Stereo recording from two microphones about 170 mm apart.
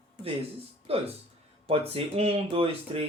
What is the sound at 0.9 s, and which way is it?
Speech, 35° right (ahead or behind).